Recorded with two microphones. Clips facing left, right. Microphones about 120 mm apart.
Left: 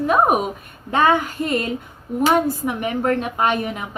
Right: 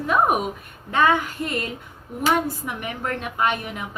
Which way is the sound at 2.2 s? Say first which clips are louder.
Left 4 dB; 35° left (ahead or behind).